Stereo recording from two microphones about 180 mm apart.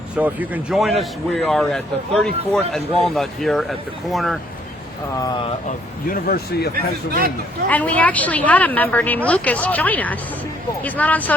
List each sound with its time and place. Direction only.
0.2 s a man's voice: 10° right (ahead or behind)
5.2 s speech: 25° left (ahead or behind)
6.1 s speech: 55° left (ahead or behind)
6.7 s speech: 55° right (ahead or behind)
7.7 s a woman's voice: 10° left (ahead or behind)